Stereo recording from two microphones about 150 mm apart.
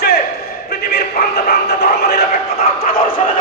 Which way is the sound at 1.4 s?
90° left.